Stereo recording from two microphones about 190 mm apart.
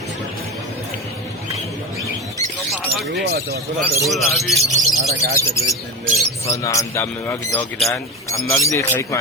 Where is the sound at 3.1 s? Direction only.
60° right (ahead or behind).